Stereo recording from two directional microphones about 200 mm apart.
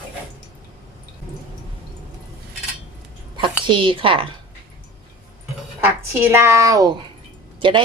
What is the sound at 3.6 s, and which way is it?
Speech, 25° right (ahead or behind).